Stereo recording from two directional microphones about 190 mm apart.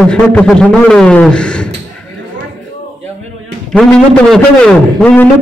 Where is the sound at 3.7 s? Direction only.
5° left (ahead or behind).